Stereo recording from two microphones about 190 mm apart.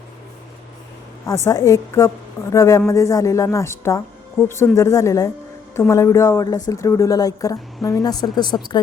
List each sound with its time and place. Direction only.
1.3 s a woman's voice: 15° left (ahead or behind)